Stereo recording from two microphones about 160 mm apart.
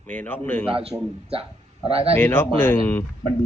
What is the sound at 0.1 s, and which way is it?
Speech, 10° left (ahead or behind).